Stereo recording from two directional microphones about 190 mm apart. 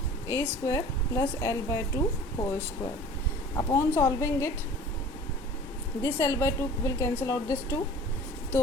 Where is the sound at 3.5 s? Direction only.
15° left (ahead or behind).